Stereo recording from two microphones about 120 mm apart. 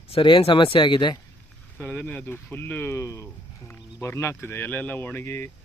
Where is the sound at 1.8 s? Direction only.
15° left (ahead or behind).